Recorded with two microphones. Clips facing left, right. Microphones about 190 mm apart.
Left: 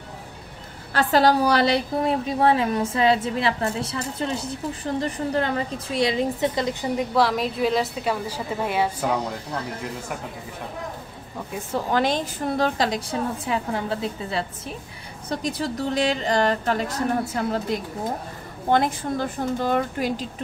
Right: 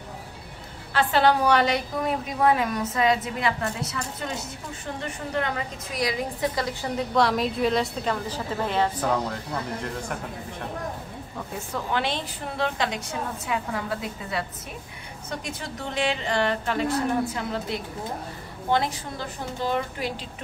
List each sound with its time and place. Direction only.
0.9 s a woman's voice: 40° left (ahead or behind); by 7.1 s 20° left (ahead or behind)
7.2 s a woman's voice: centre (ahead or behind)
11.9 s a woman's voice: 40° left (ahead or behind)